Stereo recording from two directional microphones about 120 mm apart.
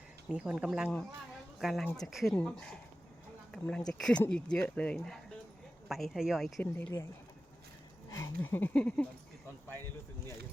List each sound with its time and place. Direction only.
0.3 s speech: 5° right (ahead or behind)
1.3 s a sound: centre (ahead or behind)
2.0 s speech: centre (ahead or behind)
5.9 s speech: centre (ahead or behind)
6.6 s speech: 15° left (ahead or behind)
8.1 s speech: 20° left (ahead or behind)